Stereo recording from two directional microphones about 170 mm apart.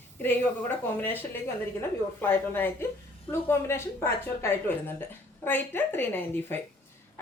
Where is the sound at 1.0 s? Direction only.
10° left (ahead or behind).